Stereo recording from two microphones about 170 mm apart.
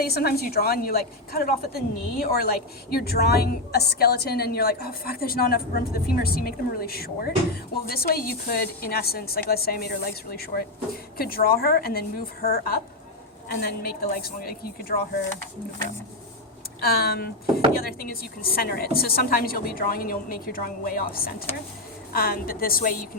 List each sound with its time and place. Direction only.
0.0 s a woman's voice: 65° left (ahead or behind)
16.8 s a woman's voice: 65° left (ahead or behind)